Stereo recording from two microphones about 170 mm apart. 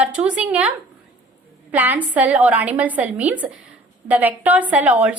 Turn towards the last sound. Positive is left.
turn(degrees=-10)  # may be behind; listen again after turning